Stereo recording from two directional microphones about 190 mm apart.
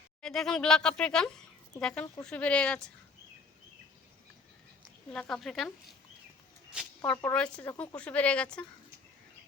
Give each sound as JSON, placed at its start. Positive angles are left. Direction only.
{"t": 0.2, "sound": "speech", "side_deg": 5}
{"t": 5.1, "sound": "speech", "side_deg": 5}
{"t": 7.1, "sound": "speech", "side_deg": 10}